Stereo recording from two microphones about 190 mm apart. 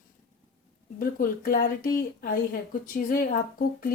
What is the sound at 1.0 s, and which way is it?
A woman's voice, 50° left (ahead or behind).